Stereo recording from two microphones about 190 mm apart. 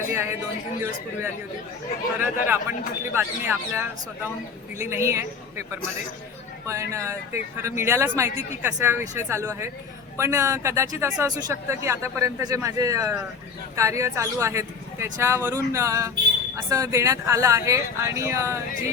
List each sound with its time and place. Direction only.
0.1 s speech: 15° right (ahead or behind)
2.1 s speech: 10° right (ahead or behind)